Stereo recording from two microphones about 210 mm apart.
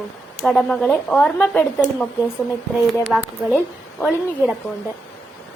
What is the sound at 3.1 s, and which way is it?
Speech, centre (ahead or behind).